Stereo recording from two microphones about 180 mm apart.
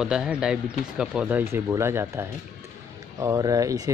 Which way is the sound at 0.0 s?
5° right (ahead or behind).